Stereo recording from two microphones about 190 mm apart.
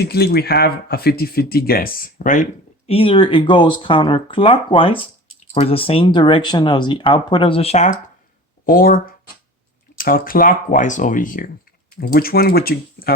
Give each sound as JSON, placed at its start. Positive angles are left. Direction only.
{"t": 0.0, "sound": "speech", "side_deg": 55}
{"t": 8.6, "sound": "speech", "side_deg": 50}